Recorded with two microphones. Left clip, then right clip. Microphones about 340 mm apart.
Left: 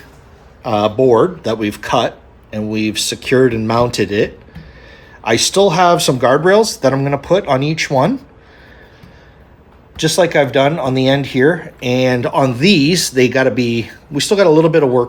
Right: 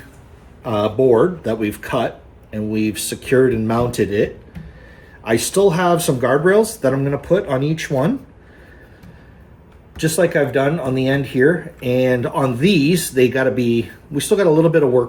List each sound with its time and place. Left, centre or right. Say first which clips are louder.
0.6 s speech: left 3 dB; centre
10.0 s speech: left 4 dB; centre